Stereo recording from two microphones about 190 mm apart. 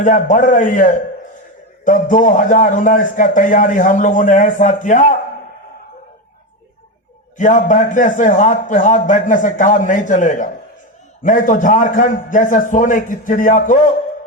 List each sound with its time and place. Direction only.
0.0 s a man's voice: 40° left (ahead or behind)
7.3 s a man's voice: 40° left (ahead or behind)